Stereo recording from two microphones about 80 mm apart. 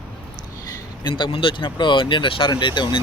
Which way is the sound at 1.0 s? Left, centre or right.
Left.